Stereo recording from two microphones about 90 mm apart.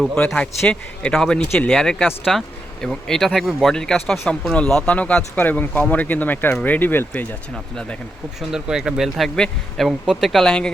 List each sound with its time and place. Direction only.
0.3 s a man's voice: 10° left (ahead or behind)
7.5 s a man's voice: 5° left (ahead or behind)
8.4 s speech: 5° right (ahead or behind)